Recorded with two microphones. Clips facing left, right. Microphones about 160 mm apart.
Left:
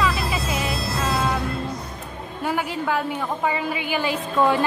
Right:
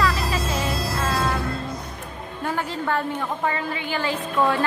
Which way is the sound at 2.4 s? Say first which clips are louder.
Left 1 dB; 10° left (ahead or behind).